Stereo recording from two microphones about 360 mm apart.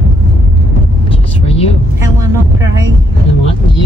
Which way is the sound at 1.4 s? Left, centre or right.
Centre.